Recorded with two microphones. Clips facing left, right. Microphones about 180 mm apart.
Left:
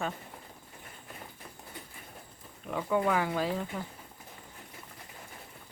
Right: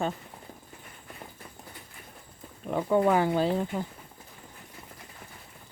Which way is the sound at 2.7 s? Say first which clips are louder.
Right 5 dB; 30° right (ahead or behind).